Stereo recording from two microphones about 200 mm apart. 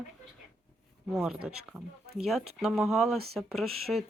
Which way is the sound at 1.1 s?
Centre (ahead or behind).